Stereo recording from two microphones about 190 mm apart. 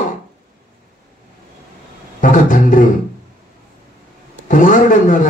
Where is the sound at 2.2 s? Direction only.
45° left (ahead or behind).